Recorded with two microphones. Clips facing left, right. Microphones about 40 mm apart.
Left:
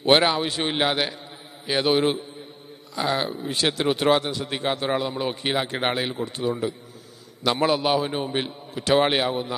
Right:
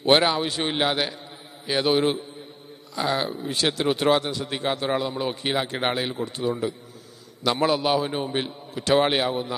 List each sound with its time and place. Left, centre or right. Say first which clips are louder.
0.0 s a man's voice: left 1 dB; centre